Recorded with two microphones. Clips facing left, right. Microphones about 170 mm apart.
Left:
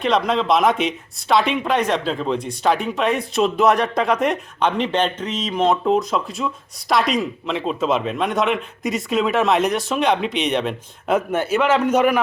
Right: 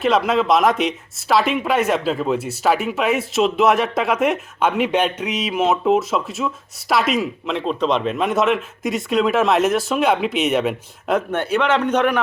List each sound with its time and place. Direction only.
0.0 s speech: 5° right (ahead or behind)